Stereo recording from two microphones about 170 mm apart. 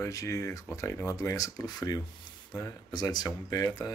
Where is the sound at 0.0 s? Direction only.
20° left (ahead or behind).